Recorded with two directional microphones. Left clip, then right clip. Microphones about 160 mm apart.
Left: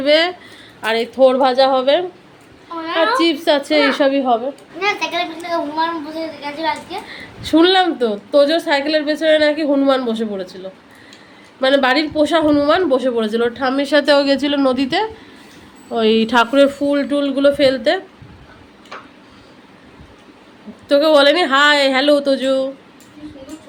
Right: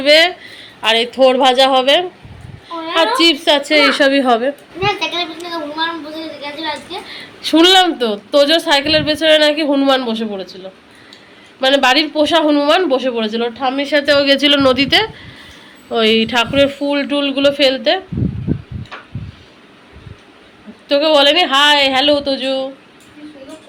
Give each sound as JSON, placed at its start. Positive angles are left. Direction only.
{"t": 0.0, "sound": "a sound", "side_deg": 20}
{"t": 0.8, "sound": "a woman's voice", "side_deg": 5}
{"t": 3.2, "sound": "a woman's voice", "side_deg": 10}
{"t": 5.1, "sound": "a woman's voice", "side_deg": 15}
{"t": 11.6, "sound": "a woman's voice", "side_deg": 15}
{"t": 14.2, "sound": "a woman's voice", "side_deg": 10}
{"t": 16.2, "sound": "speech", "side_deg": 30}
{"t": 16.9, "sound": "a woman's voice", "side_deg": 15}
{"t": 20.8, "sound": "speech", "side_deg": 30}